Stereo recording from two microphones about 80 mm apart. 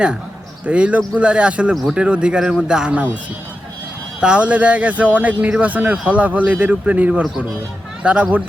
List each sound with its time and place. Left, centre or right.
0.6 s speech: centre
1.7 s speech: centre
2.0 s speech: centre
4.2 s speech: centre